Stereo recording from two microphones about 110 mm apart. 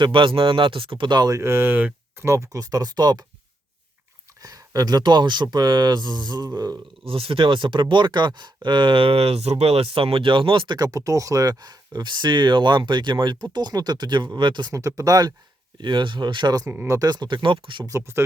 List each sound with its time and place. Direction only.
0.0 s speech: 50° right (ahead or behind)
1.3 s speech: 25° right (ahead or behind); by 3.2 s 40° right (ahead or behind)
4.4 s speech: 35° right (ahead or behind)
7.0 s speech: 55° right (ahead or behind)
10.8 s speech: 35° right (ahead or behind)
14.7 s speech: 30° right (ahead or behind)
15.8 s speech: 45° right (ahead or behind)
17.8 s speech: 25° right (ahead or behind)